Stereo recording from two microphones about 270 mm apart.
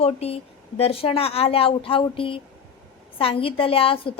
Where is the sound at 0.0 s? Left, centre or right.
Left.